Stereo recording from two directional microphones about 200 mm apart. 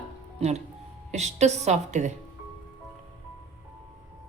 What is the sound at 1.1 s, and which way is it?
A woman's voice, 35° right (ahead or behind).